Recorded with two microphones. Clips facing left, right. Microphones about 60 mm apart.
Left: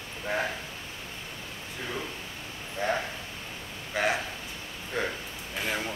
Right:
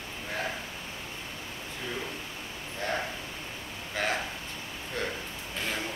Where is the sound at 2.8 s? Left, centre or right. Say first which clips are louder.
Left 3 dB; centre.